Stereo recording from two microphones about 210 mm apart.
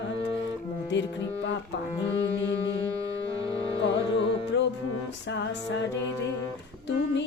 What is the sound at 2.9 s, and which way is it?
Music, 15° right (ahead or behind).